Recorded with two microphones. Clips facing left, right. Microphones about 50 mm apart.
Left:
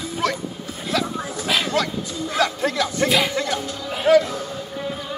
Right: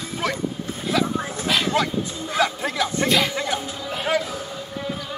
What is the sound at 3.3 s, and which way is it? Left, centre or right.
Music, centre.